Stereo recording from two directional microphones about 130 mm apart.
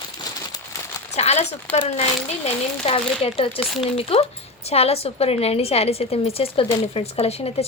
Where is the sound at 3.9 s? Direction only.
50° left (ahead or behind).